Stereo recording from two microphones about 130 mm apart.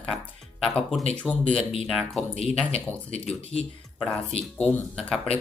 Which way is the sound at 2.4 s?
50° left (ahead or behind).